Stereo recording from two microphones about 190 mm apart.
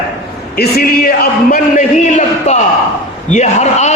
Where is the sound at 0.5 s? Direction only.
50° left (ahead or behind).